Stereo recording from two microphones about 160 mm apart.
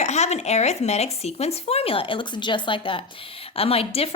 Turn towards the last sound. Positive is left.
turn(degrees=35)  # may be behind; listen again after turning